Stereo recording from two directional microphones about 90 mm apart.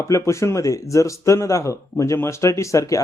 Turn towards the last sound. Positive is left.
turn(degrees=35)  # may be behind; listen again after turning